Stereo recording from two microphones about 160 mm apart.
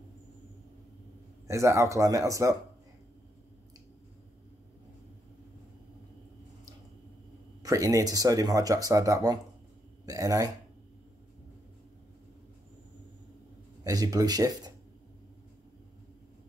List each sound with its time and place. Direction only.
1.5 s speech: 20° right (ahead or behind)
7.6 s speech: 20° right (ahead or behind)
13.8 s speech: 25° right (ahead or behind)